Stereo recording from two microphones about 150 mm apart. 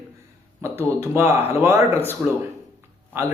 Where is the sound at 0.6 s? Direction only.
15° right (ahead or behind).